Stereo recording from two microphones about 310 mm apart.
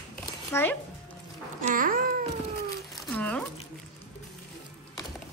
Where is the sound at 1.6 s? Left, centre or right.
Right.